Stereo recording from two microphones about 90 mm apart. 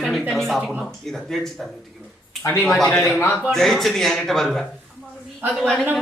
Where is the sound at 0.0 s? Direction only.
Centre (ahead or behind).